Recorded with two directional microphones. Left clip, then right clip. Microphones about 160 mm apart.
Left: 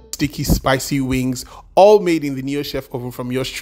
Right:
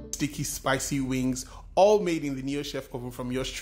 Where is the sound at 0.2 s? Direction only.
40° left (ahead or behind).